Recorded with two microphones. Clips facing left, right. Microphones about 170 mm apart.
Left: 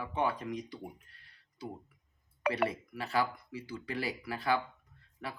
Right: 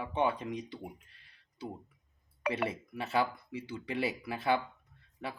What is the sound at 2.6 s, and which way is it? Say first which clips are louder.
Speech: left 1 dB; 20° right (ahead or behind).